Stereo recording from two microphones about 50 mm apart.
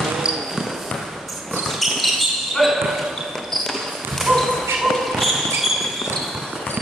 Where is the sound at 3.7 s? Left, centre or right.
Centre.